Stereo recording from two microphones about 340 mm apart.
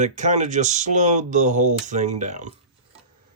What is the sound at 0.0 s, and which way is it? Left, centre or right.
Speech, right.